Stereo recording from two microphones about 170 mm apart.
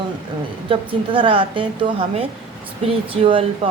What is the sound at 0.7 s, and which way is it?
A woman's voice, 30° right (ahead or behind).